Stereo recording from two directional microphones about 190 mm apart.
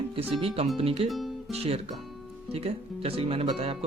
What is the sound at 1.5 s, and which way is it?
Speech, 30° right (ahead or behind).